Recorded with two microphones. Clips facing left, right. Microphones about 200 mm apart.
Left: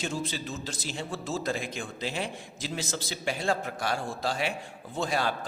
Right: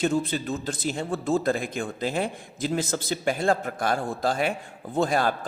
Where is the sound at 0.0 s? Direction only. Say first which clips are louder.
Right 8 dB; 55° right (ahead or behind).